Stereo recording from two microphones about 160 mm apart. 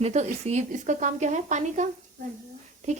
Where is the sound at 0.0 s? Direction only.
45° right (ahead or behind).